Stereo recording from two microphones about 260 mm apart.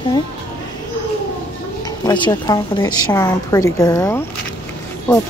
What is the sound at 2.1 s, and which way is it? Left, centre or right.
A woman's voice, centre.